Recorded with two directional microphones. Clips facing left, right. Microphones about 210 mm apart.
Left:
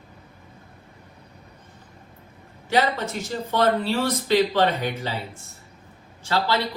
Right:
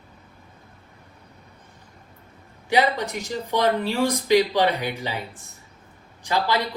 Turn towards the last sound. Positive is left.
turn(degrees=-15)  # may be behind; listen again after turning